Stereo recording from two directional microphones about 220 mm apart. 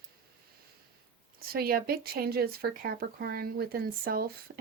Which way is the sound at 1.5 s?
45° right (ahead or behind).